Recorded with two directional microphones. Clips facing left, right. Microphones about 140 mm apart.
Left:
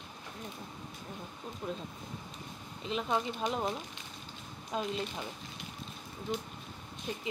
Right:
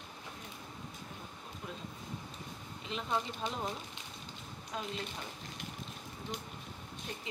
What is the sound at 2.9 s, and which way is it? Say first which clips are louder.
Speech: left 4 dB; 20° left (ahead or behind).